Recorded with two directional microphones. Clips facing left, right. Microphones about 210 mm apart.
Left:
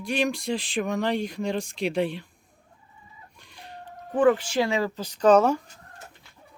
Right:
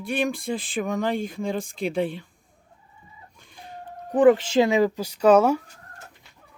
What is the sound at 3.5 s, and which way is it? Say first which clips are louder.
Music: right 2 dB; 50° right (ahead or behind).